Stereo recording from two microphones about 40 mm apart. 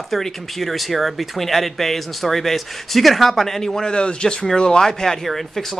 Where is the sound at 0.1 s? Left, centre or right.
Centre.